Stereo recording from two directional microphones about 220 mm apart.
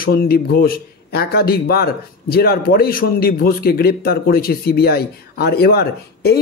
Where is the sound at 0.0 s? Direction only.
40° left (ahead or behind).